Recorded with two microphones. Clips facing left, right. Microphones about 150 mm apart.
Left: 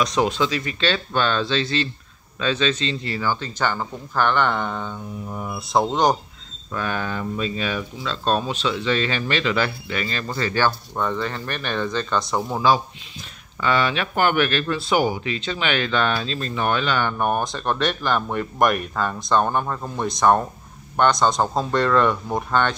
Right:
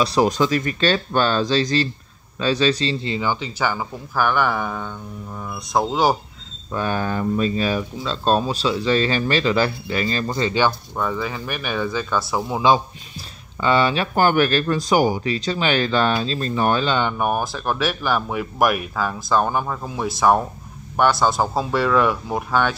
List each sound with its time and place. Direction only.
0.0 s speech: 35° right (ahead or behind)
3.2 s speech: 15° right (ahead or behind)
5.3 s speech: 15° left (ahead or behind)
5.7 s speech: centre (ahead or behind)
6.7 s speech: 30° right (ahead or behind)
10.3 s speech: 20° right (ahead or behind)
11.0 s speech: 5° right (ahead or behind)
13.6 s speech: 30° right (ahead or behind)
17.2 s speech: 5° right (ahead or behind)